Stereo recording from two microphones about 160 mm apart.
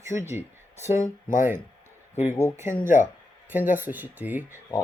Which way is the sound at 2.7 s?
55° left (ahead or behind).